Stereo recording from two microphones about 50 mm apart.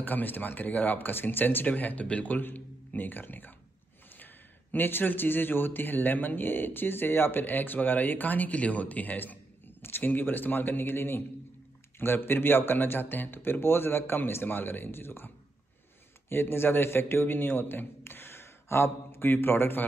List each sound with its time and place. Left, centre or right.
0.0 s speech: left
4.7 s a man's voice: left